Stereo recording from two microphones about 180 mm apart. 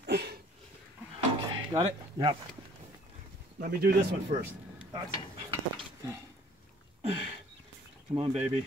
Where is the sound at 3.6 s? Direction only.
55° right (ahead or behind).